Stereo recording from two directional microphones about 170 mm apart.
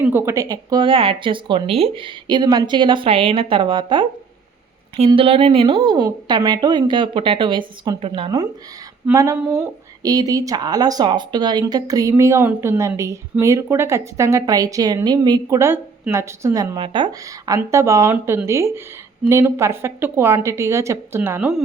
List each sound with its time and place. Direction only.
0.1 s speech: 15° right (ahead or behind)